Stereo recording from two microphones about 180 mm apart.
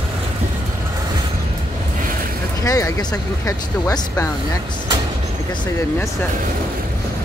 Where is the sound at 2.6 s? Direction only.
20° left (ahead or behind).